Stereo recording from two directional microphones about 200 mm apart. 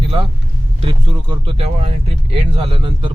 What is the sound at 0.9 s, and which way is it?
Speech, 25° right (ahead or behind).